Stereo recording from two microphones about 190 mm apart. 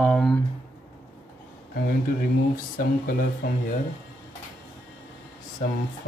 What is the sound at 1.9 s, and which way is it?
Speech, 50° left (ahead or behind).